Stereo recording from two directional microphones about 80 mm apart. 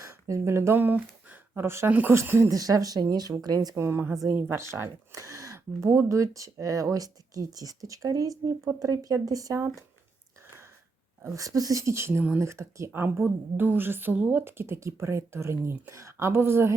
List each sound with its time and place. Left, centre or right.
0.3 s a woman's voice: right
2.5 s speech: right
3.8 s speech: right
5.1 s speech: right
9.6 s speech: right
11.2 s a woman's voice: right